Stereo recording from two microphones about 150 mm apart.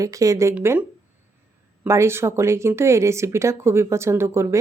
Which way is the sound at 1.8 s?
15° right (ahead or behind).